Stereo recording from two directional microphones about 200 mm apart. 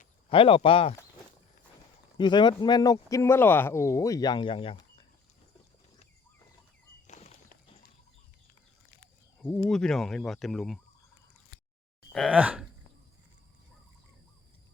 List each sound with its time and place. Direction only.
0.3 s speech: 25° left (ahead or behind)
2.1 s speech: 20° left (ahead or behind)
7.1 s a sound: 35° left (ahead or behind)
9.6 s speech: centre (ahead or behind)
12.1 s speech: 5° right (ahead or behind)